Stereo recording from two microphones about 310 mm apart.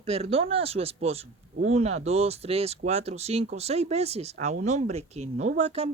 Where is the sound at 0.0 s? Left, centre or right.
Centre.